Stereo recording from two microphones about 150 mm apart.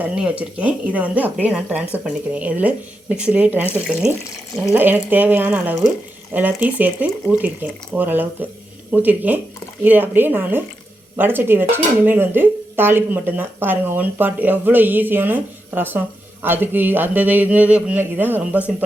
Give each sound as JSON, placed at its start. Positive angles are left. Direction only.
{"t": 0.0, "sound": "speech", "side_deg": -10}